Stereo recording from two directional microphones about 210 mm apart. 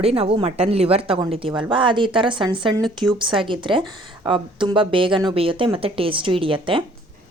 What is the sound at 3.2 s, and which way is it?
Speech, 25° right (ahead or behind).